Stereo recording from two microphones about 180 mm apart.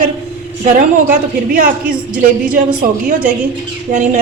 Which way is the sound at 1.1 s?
50° right (ahead or behind).